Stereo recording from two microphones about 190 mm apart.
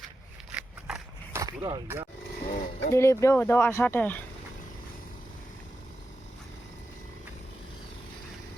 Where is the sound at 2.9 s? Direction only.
15° left (ahead or behind).